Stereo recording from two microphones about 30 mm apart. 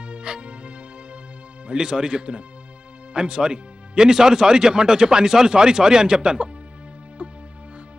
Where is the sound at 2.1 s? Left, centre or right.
Right.